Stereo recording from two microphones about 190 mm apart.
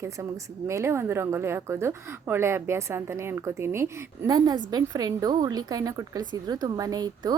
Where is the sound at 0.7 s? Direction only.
15° right (ahead or behind).